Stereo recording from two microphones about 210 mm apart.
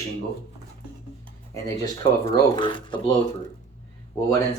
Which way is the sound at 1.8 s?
15° left (ahead or behind).